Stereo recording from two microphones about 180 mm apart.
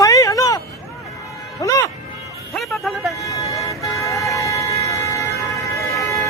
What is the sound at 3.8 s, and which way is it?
Vehicle, 15° left (ahead or behind).